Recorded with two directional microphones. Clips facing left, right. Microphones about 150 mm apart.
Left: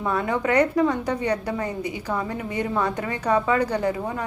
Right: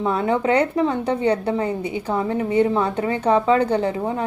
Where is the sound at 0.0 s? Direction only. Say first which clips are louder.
Right 4 dB; 25° right (ahead or behind).